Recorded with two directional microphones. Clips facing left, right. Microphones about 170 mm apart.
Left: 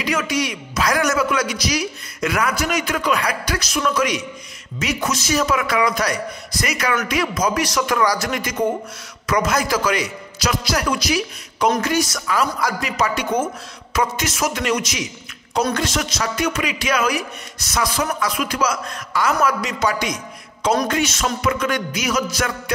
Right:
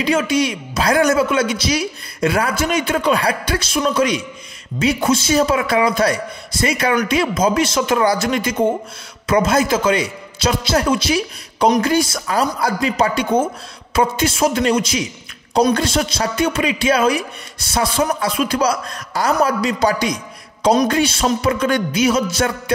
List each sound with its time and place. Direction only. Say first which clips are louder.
0.0 s a man's voice: right 5 dB; 30° right (ahead or behind)
13.9 s music: right 5 dB; 30° right (ahead or behind)
15.7 s a man's voice: right 5 dB; 30° right (ahead or behind)
20.9 s music: right 4 dB; 30° right (ahead or behind)